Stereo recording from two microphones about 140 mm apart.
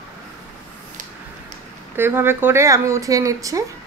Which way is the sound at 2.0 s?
15° right (ahead or behind).